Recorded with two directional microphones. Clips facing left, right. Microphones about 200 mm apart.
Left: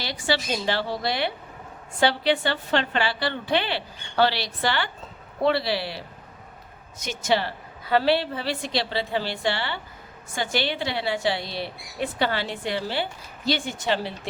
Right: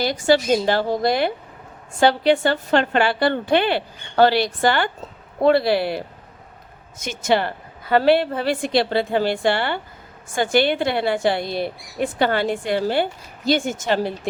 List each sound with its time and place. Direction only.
0.0 s speech: 45° right (ahead or behind)